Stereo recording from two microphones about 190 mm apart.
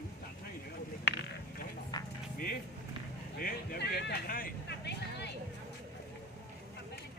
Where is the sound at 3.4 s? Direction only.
50° left (ahead or behind).